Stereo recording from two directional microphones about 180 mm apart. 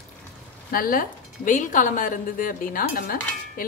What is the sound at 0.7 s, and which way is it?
A woman's voice, 50° left (ahead or behind).